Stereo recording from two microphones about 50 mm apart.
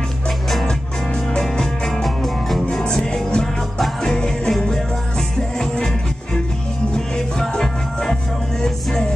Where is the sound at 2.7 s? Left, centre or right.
Centre.